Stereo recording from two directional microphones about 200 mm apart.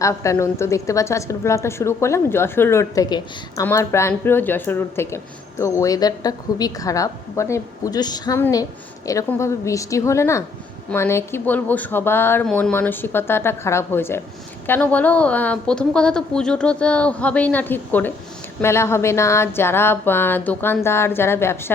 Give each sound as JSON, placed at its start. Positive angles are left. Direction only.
{"t": 0.0, "sound": "speech", "side_deg": 15}